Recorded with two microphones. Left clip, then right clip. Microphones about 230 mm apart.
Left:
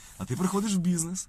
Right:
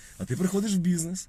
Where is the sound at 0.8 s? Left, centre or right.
Left.